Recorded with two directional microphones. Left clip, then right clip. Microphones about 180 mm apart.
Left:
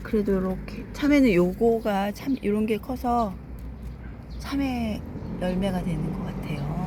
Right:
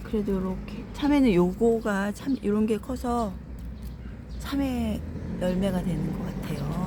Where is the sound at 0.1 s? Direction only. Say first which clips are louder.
Left 4 dB; 20° left (ahead or behind).